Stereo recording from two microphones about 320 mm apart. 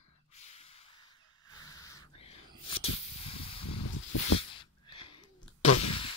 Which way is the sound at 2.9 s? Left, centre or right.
Left.